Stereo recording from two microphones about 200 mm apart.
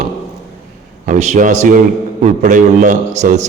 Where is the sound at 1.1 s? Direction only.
35° right (ahead or behind).